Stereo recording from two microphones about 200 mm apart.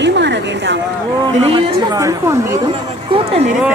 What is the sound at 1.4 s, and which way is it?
Speech, 30° right (ahead or behind).